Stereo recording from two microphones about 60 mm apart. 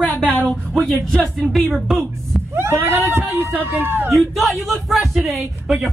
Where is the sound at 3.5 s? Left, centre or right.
Right.